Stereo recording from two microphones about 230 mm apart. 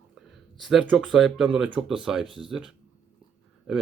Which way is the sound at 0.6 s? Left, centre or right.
Centre.